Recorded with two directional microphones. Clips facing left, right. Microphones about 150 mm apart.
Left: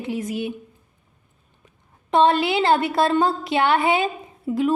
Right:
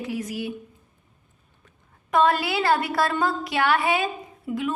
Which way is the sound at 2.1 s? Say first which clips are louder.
Left 3 dB; 25° left (ahead or behind).